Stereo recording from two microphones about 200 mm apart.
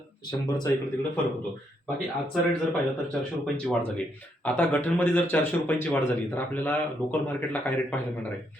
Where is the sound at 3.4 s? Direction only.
Centre (ahead or behind).